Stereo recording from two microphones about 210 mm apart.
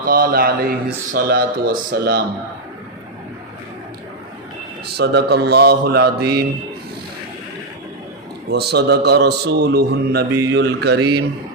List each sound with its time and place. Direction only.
0.0 s a man's voice: 45° right (ahead or behind)
4.9 s a man's voice: 50° right (ahead or behind)
8.4 s a man's voice: 50° right (ahead or behind)